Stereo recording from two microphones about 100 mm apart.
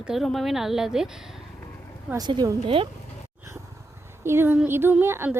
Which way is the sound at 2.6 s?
65° right (ahead or behind).